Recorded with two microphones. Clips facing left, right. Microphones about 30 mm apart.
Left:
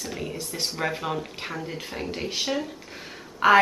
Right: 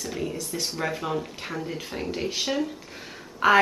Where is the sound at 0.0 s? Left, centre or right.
Centre.